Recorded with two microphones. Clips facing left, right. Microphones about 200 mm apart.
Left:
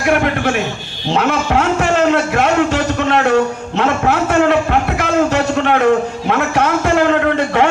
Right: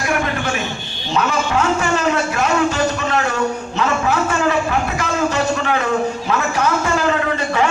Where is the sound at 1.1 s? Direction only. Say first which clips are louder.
Left 3 dB; 60° left (ahead or behind).